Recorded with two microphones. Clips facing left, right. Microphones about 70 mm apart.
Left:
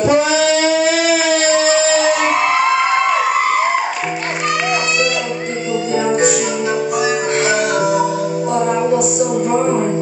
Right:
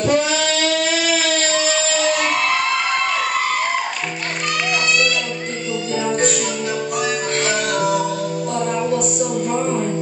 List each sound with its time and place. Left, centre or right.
0.0 s a sound: centre
6.0 s music: centre
7.4 s music: centre
9.6 s music: left